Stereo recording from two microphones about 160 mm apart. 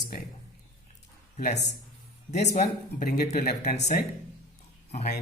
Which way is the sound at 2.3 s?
45° left (ahead or behind).